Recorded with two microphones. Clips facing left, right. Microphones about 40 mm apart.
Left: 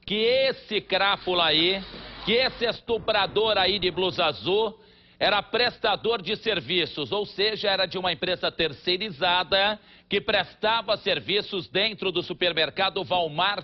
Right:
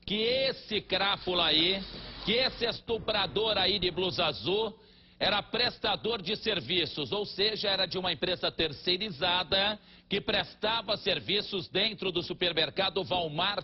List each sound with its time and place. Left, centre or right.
0.1 s a man's voice: left
1.7 s music: left
2.4 s a man's voice: left
13.1 s speech: centre